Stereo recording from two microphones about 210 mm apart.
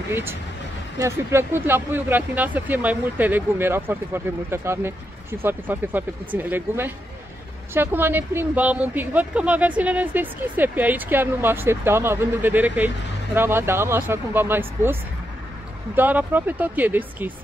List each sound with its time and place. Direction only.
0.1 s speech: 10° right (ahead or behind)